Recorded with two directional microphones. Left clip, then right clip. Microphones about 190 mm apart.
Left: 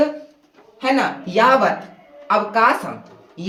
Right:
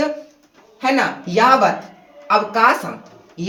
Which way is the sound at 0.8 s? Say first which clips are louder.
Right 1 dB; 20° left (ahead or behind).